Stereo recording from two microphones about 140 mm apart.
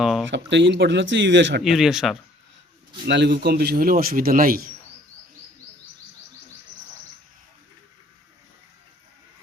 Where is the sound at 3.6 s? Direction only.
90° right.